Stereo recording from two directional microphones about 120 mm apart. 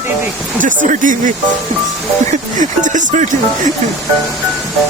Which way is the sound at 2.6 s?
90° right.